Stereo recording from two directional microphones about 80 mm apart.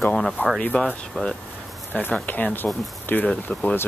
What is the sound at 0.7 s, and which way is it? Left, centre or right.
Speech, centre.